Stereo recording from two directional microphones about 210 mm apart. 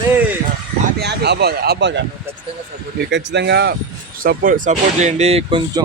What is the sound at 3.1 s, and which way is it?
Speech, 55° right (ahead or behind).